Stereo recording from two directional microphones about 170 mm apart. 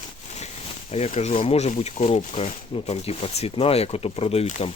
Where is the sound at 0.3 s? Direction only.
40° left (ahead or behind).